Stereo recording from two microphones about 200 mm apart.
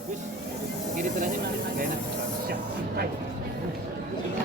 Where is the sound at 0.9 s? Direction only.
45° right (ahead or behind).